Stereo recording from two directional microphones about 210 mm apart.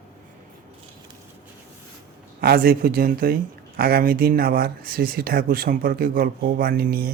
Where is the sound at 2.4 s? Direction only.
45° right (ahead or behind).